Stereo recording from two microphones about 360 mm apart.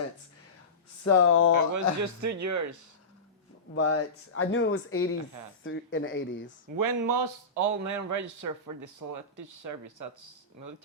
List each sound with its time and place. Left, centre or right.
1.0 s speech: left
1.7 s a man's voice: right
3.8 s speech: left
6.7 s a man's voice: right